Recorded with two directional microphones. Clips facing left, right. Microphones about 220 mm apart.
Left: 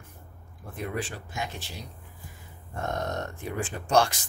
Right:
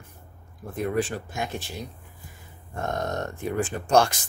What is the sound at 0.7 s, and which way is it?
Speech, 45° right (ahead or behind).